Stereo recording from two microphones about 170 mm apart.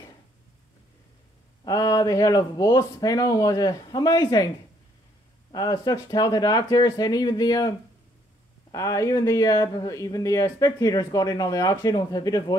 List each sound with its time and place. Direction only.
1.6 s speech: 25° left (ahead or behind)
5.5 s speech: 25° left (ahead or behind)
8.7 s speech: 20° left (ahead or behind)